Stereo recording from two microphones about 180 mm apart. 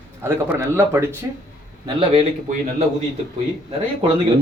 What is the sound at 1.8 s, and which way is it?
Speech, 30° right (ahead or behind).